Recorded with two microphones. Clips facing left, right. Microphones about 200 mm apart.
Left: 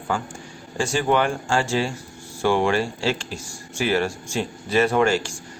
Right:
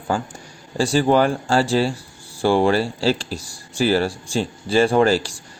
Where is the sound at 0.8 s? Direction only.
35° right (ahead or behind).